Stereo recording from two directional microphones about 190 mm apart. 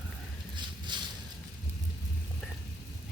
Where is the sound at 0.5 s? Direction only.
25° right (ahead or behind).